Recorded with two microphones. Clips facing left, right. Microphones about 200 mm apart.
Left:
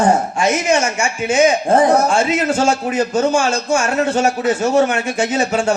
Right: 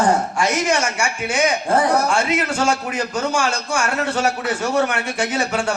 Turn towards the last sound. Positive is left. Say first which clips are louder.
# left 4 dB
turn(degrees=20)  # may be behind; listen again after turning